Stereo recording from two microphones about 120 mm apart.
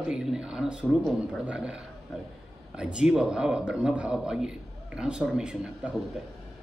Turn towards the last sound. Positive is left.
turn(degrees=-5)  # may be behind; listen again after turning